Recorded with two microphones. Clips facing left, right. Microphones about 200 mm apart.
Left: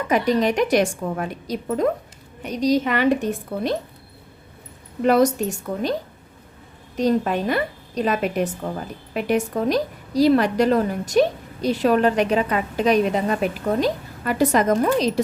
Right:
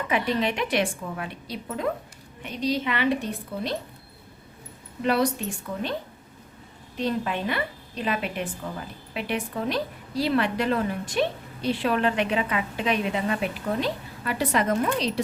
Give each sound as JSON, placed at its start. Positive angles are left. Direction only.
{"t": 0.1, "sound": "a woman's voice", "side_deg": 40}
{"t": 5.0, "sound": "a woman's voice", "side_deg": 45}